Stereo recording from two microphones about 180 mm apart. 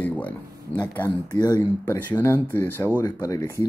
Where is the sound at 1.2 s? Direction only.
20° left (ahead or behind).